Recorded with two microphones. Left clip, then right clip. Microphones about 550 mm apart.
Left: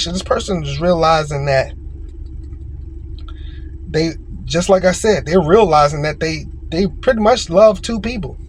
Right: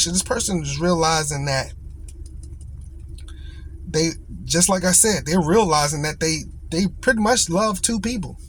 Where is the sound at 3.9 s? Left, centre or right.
Right.